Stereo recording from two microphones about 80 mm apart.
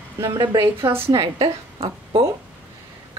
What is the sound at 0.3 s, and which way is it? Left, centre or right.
Speech, right.